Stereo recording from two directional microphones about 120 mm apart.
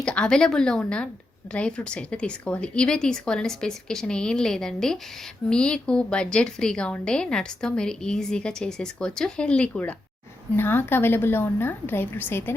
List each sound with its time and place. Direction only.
0.0 s a woman's voice: 5° left (ahead or behind)